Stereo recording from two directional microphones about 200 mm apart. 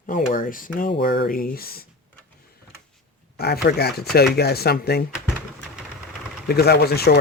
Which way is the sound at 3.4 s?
50° left (ahead or behind).